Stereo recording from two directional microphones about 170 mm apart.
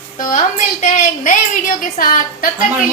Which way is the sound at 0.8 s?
50° left (ahead or behind).